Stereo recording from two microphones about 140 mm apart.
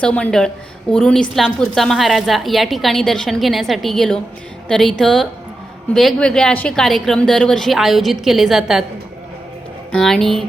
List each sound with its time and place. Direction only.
0.0 s a woman's voice: 10° left (ahead or behind)
9.9 s a woman's voice: 5° left (ahead or behind)